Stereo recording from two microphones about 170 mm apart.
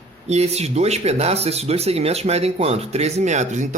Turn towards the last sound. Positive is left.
turn(degrees=-45)  # may be behind; listen again after turning